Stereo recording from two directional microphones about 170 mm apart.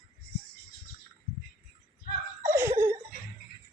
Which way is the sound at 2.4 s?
15° right (ahead or behind).